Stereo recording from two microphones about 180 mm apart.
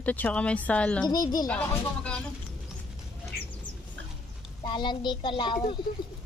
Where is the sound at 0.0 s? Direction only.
10° left (ahead or behind).